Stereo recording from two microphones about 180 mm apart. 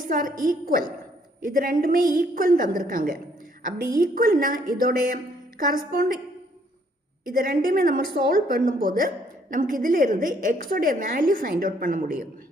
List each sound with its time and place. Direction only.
0.1 s a woman's voice: 50° right (ahead or behind)
7.3 s a woman's voice: 50° right (ahead or behind)